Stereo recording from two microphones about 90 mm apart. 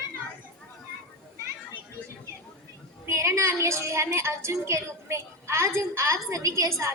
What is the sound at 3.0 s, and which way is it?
A woman's voice, 35° right (ahead or behind).